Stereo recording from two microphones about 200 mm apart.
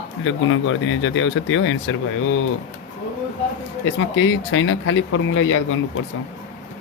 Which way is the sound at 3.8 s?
75° left (ahead or behind).